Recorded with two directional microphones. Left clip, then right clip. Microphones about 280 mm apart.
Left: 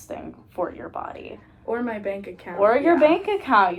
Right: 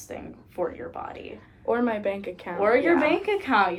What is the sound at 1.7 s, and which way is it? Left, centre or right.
Speech, centre.